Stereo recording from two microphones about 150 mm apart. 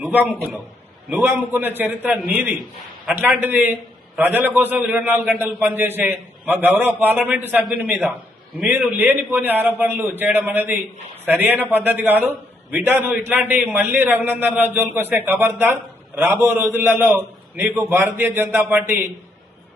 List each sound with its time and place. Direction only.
0.0 s a man's voice: 10° right (ahead or behind)